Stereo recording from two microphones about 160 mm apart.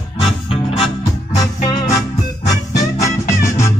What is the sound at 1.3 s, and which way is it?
Music, 20° left (ahead or behind).